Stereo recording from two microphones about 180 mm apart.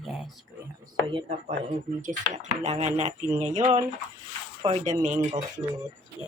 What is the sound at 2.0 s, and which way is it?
Speech, 45° right (ahead or behind).